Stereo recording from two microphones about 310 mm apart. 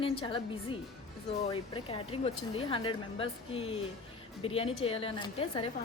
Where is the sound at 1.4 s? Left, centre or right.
Centre.